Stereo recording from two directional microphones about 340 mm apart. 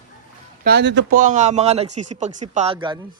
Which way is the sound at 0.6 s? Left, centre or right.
Right.